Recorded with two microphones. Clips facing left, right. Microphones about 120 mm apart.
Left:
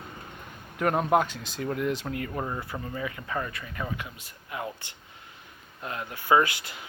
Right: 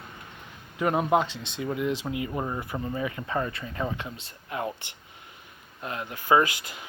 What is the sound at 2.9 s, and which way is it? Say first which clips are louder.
Speech: right 3 dB; 25° right (ahead or behind).